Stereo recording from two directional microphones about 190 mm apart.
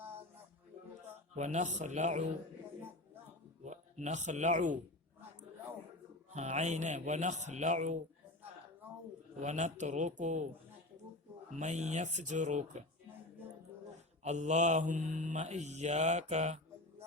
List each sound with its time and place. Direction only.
1.4 s mantra: 40° right (ahead or behind)
3.6 s speech: 40° right (ahead or behind)
6.3 s mantra: 40° right (ahead or behind)
9.4 s mantra: 40° right (ahead or behind)
11.5 s mantra: 40° right (ahead or behind)
14.3 s mantra: 35° right (ahead or behind)